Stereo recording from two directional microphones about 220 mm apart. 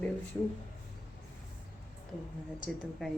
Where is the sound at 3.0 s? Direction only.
Centre (ahead or behind).